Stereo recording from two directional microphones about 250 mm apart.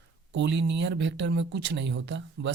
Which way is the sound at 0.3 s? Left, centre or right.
Right.